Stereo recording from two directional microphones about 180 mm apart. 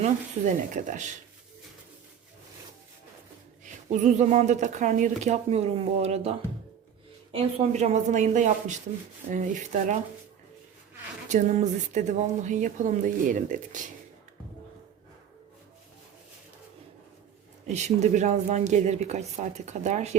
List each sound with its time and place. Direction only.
0.7 s speech: 45° right (ahead or behind)
3.6 s speech: 40° right (ahead or behind)
7.3 s speech: 40° right (ahead or behind)
11.3 s speech: 40° right (ahead or behind)
17.7 s speech: 40° right (ahead or behind)